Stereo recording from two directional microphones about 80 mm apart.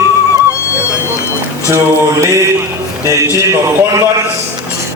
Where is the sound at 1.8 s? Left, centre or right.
Right.